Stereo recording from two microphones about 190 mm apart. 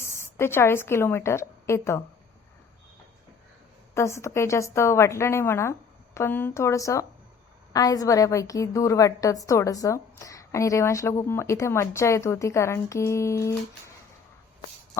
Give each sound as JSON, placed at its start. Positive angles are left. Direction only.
{"t": 0.0, "sound": "a woman's voice", "side_deg": 15}
{"t": 3.9, "sound": "a woman's voice", "side_deg": 15}